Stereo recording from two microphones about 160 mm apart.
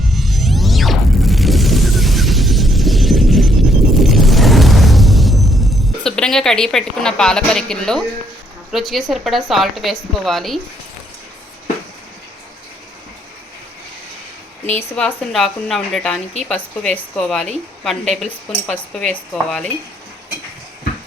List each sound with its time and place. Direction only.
0.1 s a sound: centre (ahead or behind)
3.9 s music: centre (ahead or behind)
6.0 s speech: 5° left (ahead or behind)
14.7 s speech: 10° left (ahead or behind)